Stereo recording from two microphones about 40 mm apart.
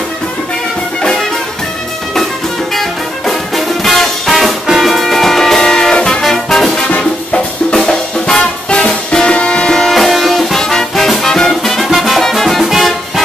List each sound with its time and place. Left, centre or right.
2.7 s music: centre
5.6 s music: centre
9.7 s music: centre
9.9 s music: centre
12.6 s music: centre